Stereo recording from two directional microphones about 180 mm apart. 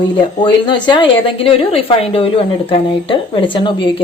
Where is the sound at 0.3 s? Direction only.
25° left (ahead or behind).